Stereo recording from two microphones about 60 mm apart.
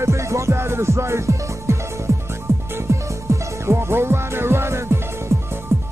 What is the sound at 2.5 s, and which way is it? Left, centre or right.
Music, right.